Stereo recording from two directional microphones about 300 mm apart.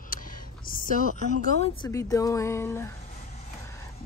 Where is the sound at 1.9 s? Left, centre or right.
Centre.